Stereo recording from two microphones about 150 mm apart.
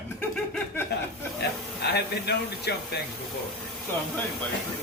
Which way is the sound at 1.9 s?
90° left.